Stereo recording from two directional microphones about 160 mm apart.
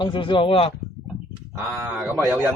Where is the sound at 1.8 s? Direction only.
15° right (ahead or behind).